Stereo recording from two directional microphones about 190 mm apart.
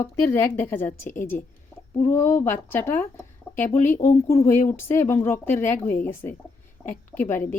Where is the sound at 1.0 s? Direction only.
45° left (ahead or behind).